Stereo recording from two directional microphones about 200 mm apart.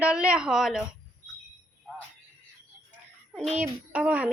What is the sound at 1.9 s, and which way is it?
Music, 5° right (ahead or behind).